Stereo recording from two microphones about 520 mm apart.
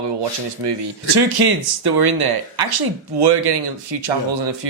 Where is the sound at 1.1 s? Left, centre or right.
Right.